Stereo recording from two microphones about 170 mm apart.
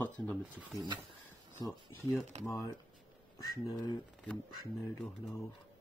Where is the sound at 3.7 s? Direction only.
25° left (ahead or behind).